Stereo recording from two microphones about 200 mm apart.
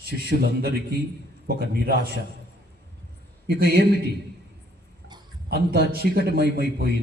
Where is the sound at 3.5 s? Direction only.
50° right (ahead or behind).